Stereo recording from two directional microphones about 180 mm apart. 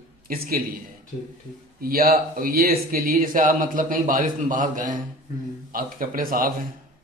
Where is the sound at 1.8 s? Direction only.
55° right (ahead or behind).